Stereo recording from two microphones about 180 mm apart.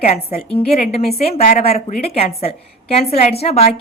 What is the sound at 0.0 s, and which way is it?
A woman's voice, 35° left (ahead or behind).